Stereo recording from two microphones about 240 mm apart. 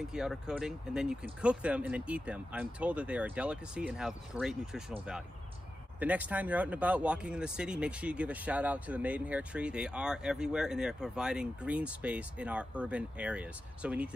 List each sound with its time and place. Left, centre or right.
0.0 s speech: centre
5.9 s speech: centre